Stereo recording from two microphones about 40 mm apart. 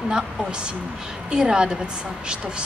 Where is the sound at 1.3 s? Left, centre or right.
Centre.